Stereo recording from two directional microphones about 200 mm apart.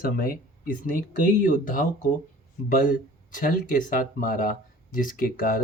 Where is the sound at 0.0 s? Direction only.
45° left (ahead or behind).